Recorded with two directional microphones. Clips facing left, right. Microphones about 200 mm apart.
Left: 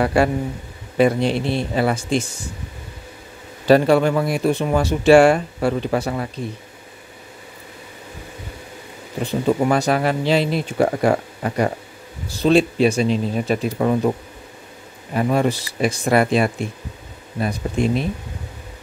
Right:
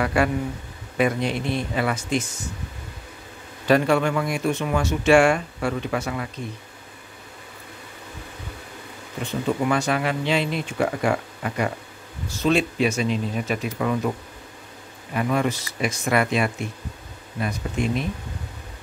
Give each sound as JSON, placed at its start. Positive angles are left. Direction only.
{"t": 0.0, "sound": "speech", "side_deg": 30}
{"t": 3.6, "sound": "speech", "side_deg": 35}
{"t": 9.2, "sound": "speech", "side_deg": 35}
{"t": 15.1, "sound": "speech", "side_deg": 35}